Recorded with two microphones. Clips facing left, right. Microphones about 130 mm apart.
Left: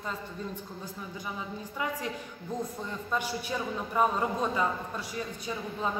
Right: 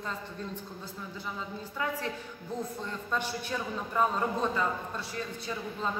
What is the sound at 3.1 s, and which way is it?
A man's voice, 10° left (ahead or behind).